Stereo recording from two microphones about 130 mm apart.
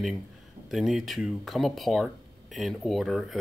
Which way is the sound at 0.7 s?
Centre (ahead or behind).